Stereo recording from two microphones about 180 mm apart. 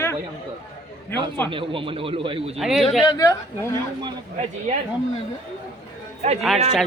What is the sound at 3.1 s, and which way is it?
Speech, 20° left (ahead or behind).